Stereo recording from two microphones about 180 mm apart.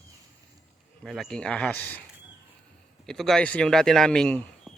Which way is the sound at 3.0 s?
Centre (ahead or behind).